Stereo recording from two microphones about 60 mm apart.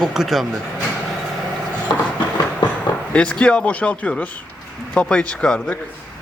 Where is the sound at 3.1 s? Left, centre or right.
Centre.